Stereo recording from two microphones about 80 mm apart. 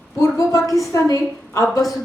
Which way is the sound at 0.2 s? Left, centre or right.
Left.